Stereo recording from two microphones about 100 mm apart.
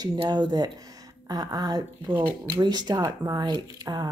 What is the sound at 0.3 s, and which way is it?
A woman's voice, 45° right (ahead or behind).